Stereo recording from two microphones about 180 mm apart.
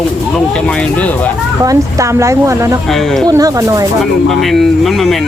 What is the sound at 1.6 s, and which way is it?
Speech, 20° right (ahead or behind).